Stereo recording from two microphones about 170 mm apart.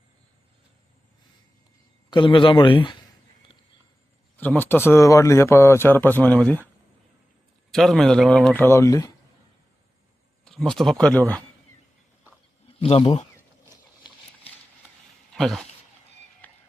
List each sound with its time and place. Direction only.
2.0 s a man's voice: 30° left (ahead or behind)
4.4 s speech: 10° left (ahead or behind)
7.7 s speech: centre (ahead or behind)
8.6 s speech: 15° left (ahead or behind)
10.4 s speech: centre (ahead or behind)
12.8 s speech: 35° left (ahead or behind)
15.4 s speech: centre (ahead or behind)